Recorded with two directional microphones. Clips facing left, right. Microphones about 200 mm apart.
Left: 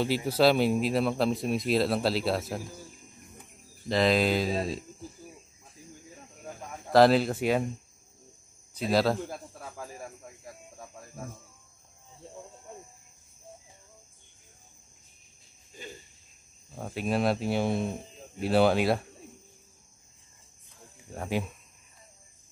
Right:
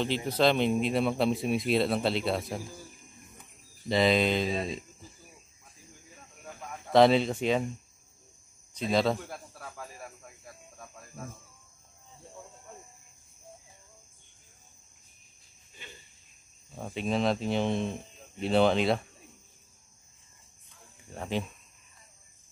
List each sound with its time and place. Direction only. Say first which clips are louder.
0.0 s speech: left 2 dB; 10° left (ahead or behind)
3.9 s speech: even; centre (ahead or behind)
6.9 s speech: left 1 dB; centre (ahead or behind)
8.7 s speech: left 1 dB; 5° left (ahead or behind)
9.5 s snake: left 3 dB; 20° left (ahead or behind)
15.7 s cricket: left 8 dB; 40° left (ahead or behind)
16.7 s speech: left 1 dB; 5° left (ahead or behind)
21.1 s speech: left 2 dB; 5° left (ahead or behind)